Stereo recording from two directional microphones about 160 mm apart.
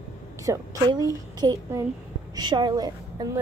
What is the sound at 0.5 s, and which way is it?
A woman's voice, 25° right (ahead or behind).